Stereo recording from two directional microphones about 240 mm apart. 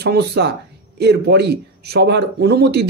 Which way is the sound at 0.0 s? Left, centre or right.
Right.